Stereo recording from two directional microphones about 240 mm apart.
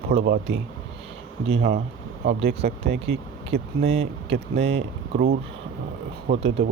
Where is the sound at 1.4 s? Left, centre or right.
Right.